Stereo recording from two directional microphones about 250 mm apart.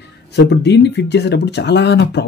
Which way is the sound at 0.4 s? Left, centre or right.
Left.